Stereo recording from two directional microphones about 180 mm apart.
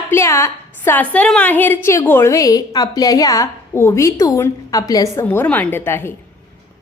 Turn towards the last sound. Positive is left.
turn(degrees=15)  # may be behind; listen again after turning